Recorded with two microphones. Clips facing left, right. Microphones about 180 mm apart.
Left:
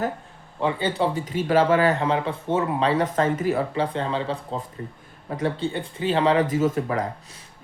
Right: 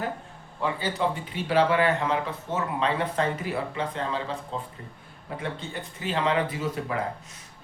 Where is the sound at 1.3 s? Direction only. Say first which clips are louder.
Left 4 dB; 45° left (ahead or behind).